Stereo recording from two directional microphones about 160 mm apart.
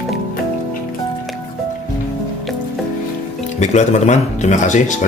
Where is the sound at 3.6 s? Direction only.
45° left (ahead or behind).